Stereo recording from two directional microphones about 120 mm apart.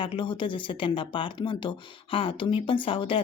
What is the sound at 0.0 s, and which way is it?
Speech, 45° left (ahead or behind).